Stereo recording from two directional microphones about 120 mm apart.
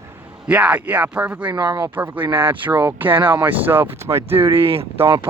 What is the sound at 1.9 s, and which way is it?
Speech, 15° right (ahead or behind).